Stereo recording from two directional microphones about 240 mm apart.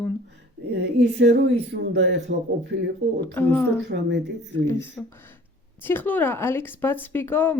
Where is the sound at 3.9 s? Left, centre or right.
Right.